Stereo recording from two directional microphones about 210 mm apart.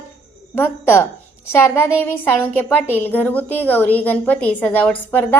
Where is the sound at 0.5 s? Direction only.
10° left (ahead or behind).